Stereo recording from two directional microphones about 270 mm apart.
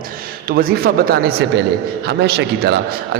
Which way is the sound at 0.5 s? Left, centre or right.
Right.